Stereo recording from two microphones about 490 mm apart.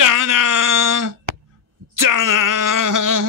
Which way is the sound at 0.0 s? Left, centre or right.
Right.